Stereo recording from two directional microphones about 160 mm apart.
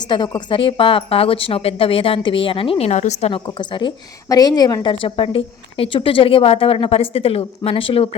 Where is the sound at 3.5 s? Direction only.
30° left (ahead or behind).